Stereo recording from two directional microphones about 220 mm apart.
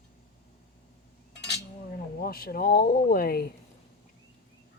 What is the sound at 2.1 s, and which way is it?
Speech, 45° left (ahead or behind).